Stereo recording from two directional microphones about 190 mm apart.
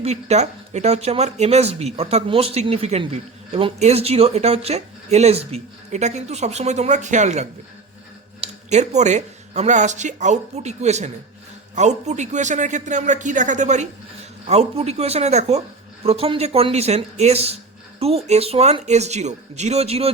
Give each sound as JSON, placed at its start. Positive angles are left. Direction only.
{"t": 0.0, "sound": "speech", "side_deg": -35}